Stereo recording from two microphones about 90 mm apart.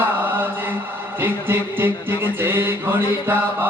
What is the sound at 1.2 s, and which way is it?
Music, 25° right (ahead or behind).